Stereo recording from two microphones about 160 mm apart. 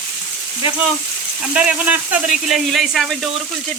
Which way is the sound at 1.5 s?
10° right (ahead or behind).